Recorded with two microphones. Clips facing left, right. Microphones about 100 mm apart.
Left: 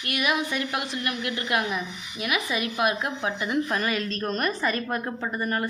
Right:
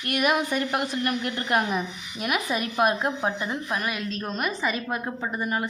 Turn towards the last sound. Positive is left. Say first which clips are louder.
# even
turn(degrees=-10)  # may be behind; listen again after turning